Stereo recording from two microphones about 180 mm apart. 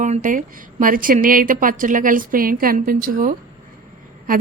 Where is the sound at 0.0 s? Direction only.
45° right (ahead or behind).